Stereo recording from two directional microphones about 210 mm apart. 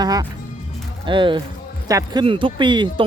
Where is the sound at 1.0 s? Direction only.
25° right (ahead or behind).